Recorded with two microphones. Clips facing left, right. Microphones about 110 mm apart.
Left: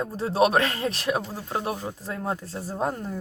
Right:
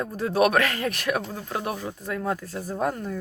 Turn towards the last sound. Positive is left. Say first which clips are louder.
# right 1 dB
turn(degrees=25)  # may be behind; listen again after turning